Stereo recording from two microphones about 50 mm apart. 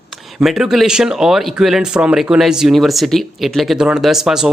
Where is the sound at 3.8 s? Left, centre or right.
Centre.